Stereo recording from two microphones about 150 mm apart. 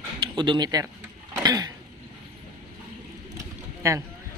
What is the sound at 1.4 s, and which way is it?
Cough, 25° right (ahead or behind).